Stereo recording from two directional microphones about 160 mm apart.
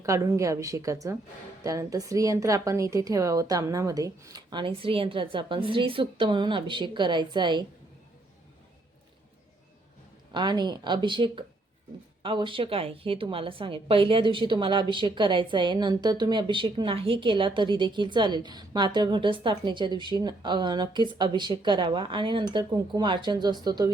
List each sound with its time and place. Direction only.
0.0 s a woman's voice: 20° right (ahead or behind)
10.3 s a woman's voice: 30° right (ahead or behind)